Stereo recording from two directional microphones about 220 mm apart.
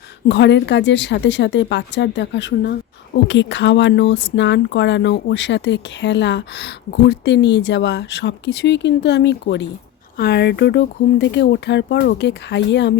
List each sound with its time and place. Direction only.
0.3 s speech: 55° left (ahead or behind)